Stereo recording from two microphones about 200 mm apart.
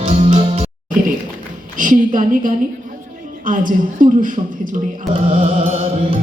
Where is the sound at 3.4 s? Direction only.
45° right (ahead or behind).